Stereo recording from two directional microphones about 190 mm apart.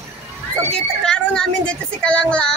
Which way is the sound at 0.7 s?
5° left (ahead or behind).